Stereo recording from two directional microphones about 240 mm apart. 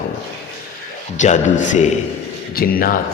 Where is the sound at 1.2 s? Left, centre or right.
Left.